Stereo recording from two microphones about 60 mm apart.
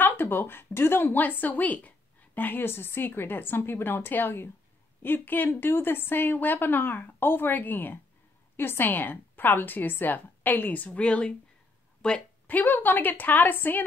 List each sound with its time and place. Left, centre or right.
0.0 s a woman's voice: left; by 12.2 s centre
12.4 s a woman's voice: left